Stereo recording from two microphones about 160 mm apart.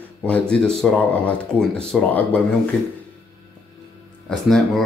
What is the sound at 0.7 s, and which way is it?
Speech, 5° left (ahead or behind).